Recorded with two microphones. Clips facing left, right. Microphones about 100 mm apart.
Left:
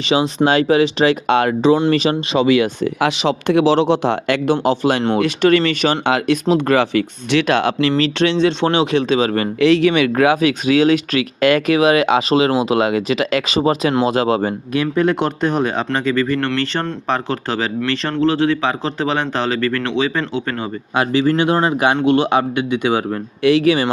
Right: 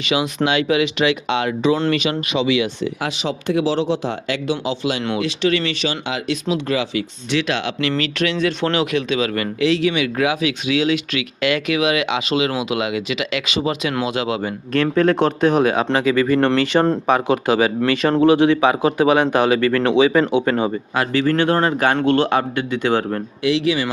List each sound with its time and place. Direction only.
0.1 s speech: 30° left (ahead or behind)
1.3 s speech: 50° left (ahead or behind)
1.9 s speech: 35° left (ahead or behind)
3.0 s speech: 80° left; by 7.7 s 50° left (ahead or behind)
7.8 s speech: 35° left (ahead or behind)
9.6 s speech: 60° left (ahead or behind); by 14.5 s 40° left (ahead or behind)
14.7 s a man's voice: 5° left (ahead or behind); by 20.7 s 15° right (ahead or behind)
20.9 s a man's voice: 20° left (ahead or behind)
23.4 s speech: 50° left (ahead or behind)